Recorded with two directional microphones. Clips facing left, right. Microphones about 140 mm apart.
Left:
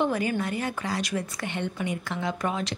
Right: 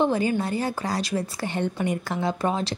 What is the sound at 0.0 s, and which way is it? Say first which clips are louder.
A woman's voice: right 3 dB; 30° right (ahead or behind).